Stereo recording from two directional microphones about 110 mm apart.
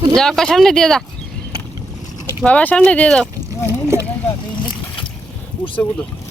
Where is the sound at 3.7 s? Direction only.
25° right (ahead or behind).